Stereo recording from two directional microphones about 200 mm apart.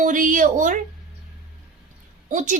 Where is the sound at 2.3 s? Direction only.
40° right (ahead or behind).